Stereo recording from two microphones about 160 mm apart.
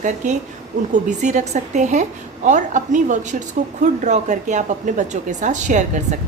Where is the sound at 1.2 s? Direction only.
50° right (ahead or behind).